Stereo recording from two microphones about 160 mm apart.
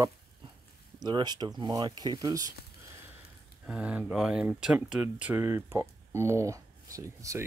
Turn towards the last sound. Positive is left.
turn(degrees=-20)  # may be behind; listen again after turning